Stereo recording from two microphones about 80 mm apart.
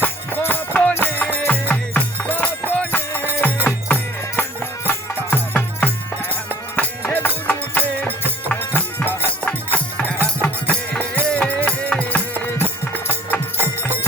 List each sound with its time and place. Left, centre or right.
0.0 s music: left